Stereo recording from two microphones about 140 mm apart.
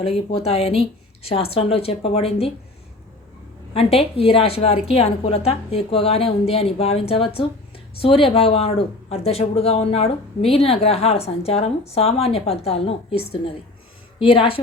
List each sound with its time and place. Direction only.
0.0 s speech: 45° left (ahead or behind)
3.8 s a woman's voice: 45° left (ahead or behind)